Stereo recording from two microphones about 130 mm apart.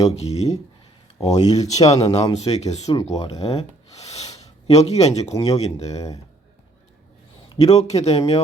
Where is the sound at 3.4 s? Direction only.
50° left (ahead or behind).